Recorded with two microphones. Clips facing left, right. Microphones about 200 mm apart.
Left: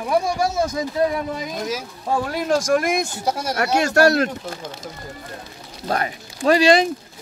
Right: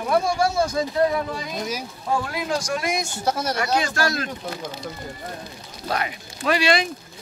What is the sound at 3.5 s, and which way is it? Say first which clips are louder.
Speech: left 6 dB; 65° left (ahead or behind).